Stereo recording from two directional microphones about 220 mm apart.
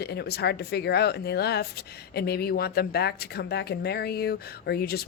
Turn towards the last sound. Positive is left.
turn(degrees=45)  # may be behind; listen again after turning